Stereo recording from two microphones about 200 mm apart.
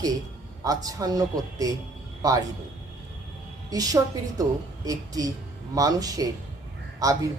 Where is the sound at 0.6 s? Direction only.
15° right (ahead or behind).